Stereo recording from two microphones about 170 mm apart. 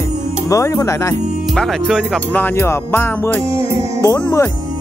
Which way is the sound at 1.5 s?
Centre (ahead or behind).